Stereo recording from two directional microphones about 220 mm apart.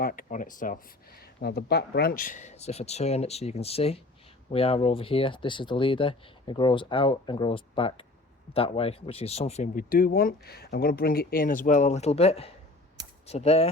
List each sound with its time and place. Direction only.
0.0 s speech: 40° left (ahead or behind)